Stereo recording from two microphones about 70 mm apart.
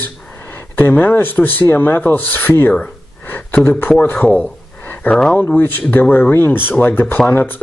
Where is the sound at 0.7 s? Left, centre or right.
Left.